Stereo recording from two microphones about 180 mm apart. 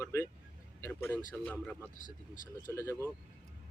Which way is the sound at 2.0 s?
45° left (ahead or behind).